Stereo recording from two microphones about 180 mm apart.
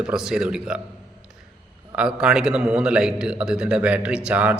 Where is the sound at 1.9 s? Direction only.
5° right (ahead or behind).